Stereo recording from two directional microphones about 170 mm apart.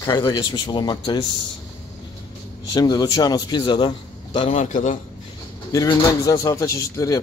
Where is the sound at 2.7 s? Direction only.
25° left (ahead or behind).